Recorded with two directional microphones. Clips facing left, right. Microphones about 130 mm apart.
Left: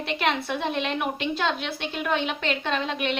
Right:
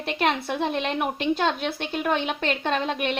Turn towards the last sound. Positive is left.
turn(degrees=-40)  # may be behind; listen again after turning